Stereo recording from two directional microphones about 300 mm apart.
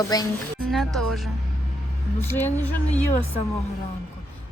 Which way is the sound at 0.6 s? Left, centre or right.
Centre.